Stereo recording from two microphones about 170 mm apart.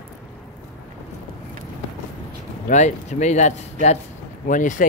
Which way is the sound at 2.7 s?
45° left (ahead or behind).